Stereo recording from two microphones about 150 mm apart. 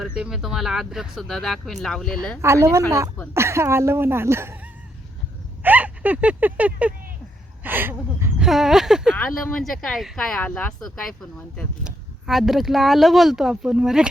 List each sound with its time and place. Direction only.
0.2 s speech: 5° right (ahead or behind)
2.4 s speech: 20° right (ahead or behind)
5.6 s a sound: 10° right (ahead or behind)
7.6 s speech: 15° right (ahead or behind)
8.4 s speech: centre (ahead or behind)
9.1 s speech: 10° left (ahead or behind)